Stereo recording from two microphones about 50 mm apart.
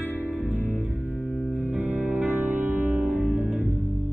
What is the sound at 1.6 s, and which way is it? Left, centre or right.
Music, right.